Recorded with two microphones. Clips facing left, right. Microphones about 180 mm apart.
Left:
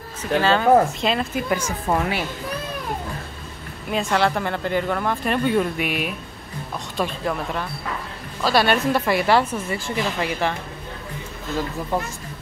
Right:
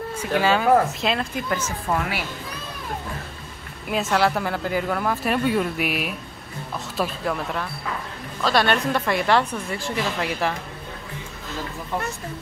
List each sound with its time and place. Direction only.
0.2 s speech: 10° right (ahead or behind); by 1.7 s 5° left (ahead or behind)
1.9 s speech: 25° left (ahead or behind)
3.9 s speech: 5° right (ahead or behind)